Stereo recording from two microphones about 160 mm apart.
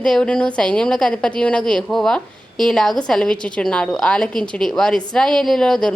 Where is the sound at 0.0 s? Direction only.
5° left (ahead or behind).